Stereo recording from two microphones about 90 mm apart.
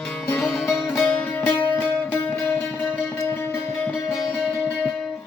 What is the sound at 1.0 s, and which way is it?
Music, 20° left (ahead or behind).